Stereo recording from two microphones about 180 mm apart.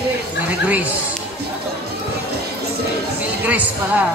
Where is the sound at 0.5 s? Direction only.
10° right (ahead or behind).